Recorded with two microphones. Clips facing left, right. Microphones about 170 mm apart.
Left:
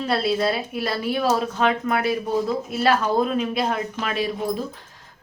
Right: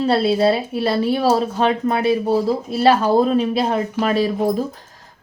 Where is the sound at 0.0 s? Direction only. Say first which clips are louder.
Right 6 dB; 30° right (ahead or behind).